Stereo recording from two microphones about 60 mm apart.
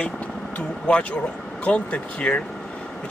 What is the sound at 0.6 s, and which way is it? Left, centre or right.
Speech, centre.